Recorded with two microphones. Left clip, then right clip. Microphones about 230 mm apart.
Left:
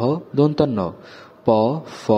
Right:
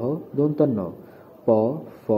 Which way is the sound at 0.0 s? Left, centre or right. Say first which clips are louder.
Left 5 dB; left.